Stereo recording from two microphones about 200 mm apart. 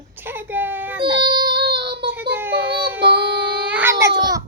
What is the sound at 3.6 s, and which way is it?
Baby cry, 10° right (ahead or behind).